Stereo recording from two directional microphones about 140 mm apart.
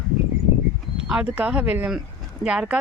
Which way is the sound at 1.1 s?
10° right (ahead or behind).